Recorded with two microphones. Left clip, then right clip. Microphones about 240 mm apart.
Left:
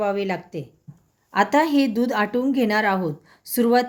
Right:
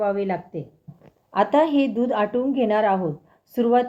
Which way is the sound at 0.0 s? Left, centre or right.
Left.